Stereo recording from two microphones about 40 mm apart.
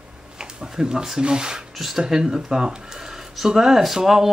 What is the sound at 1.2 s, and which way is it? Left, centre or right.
Speech, centre.